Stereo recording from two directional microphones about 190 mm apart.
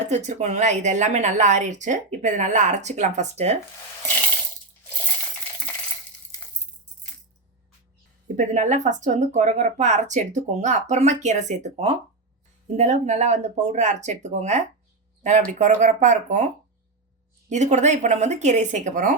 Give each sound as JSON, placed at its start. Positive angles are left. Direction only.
{"t": 0.1, "sound": "speech", "side_deg": -40}
{"t": 8.4, "sound": "speech", "side_deg": -40}
{"t": 17.5, "sound": "speech", "side_deg": -40}